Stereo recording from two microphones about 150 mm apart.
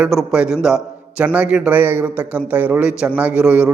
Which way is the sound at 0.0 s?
Centre (ahead or behind).